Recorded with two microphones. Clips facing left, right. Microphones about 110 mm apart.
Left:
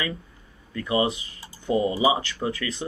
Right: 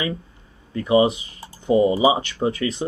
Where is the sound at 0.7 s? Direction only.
25° right (ahead or behind).